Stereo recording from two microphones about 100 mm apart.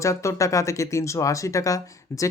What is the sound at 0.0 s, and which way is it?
Speech, 30° left (ahead or behind).